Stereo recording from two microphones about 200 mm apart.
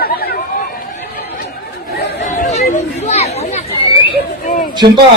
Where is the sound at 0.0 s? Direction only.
50° left (ahead or behind).